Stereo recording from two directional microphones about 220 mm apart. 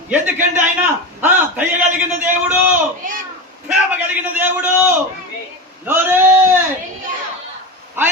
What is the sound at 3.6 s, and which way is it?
A man's voice, 5° right (ahead or behind).